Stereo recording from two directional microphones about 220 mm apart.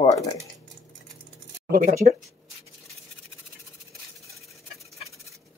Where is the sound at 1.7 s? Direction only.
40° right (ahead or behind).